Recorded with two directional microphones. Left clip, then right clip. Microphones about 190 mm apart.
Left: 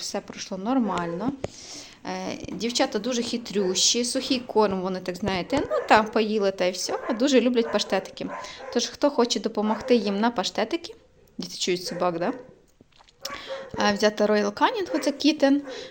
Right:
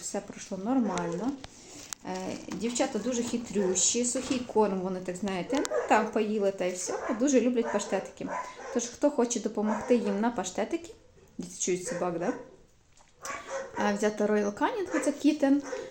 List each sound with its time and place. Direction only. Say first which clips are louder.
0.1 s speech: left 4 dB; 10° left (ahead or behind)
2.0 s a woman's voice: left 5 dB; 20° left (ahead or behind)
13.7 s speech: left 7 dB; 15° left (ahead or behind)